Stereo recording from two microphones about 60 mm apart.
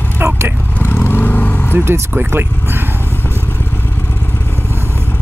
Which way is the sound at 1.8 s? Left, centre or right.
Right.